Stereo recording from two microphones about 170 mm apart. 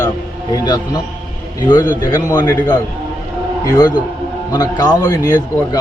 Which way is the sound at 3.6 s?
25° left (ahead or behind).